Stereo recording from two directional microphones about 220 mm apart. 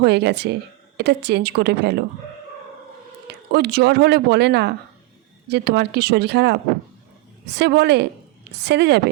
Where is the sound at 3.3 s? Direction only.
45° right (ahead or behind).